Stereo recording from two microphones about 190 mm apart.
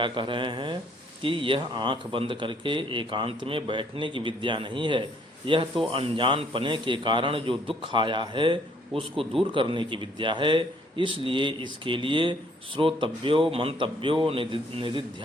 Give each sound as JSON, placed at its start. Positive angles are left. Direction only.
{"t": 0.0, "sound": "a man's voice", "side_deg": -25}